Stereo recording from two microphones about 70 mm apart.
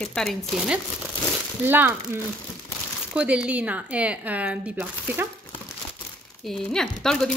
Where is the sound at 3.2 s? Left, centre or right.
Centre.